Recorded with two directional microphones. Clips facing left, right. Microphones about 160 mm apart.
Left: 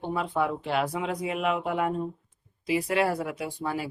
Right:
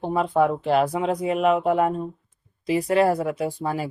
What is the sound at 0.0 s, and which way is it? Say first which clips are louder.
Speech: right 7 dB; 40° right (ahead or behind).